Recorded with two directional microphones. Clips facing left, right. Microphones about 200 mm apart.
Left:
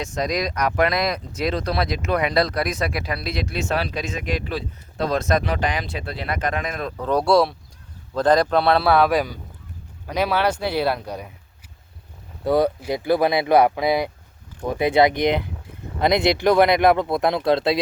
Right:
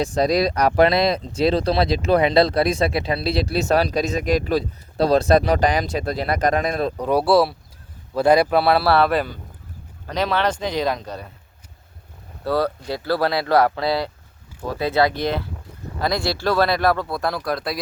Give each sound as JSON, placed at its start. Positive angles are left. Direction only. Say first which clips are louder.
{"t": 0.0, "sound": "speech", "louder": "right 6 dB", "side_deg": -35}
{"t": 6.9, "sound": "a man's voice", "louder": "even", "side_deg": -15}
{"t": 9.0, "sound": "speech", "louder": "left 1 dB", "side_deg": 10}
{"t": 12.5, "sound": "speech", "louder": "left 3 dB", "side_deg": 20}